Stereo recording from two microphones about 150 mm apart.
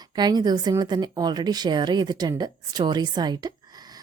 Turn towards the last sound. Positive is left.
turn(degrees=-25)  # may be behind; listen again after turning